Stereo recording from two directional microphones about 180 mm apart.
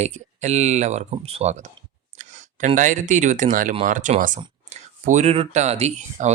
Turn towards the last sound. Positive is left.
turn(degrees=-40)  # may be behind; listen again after turning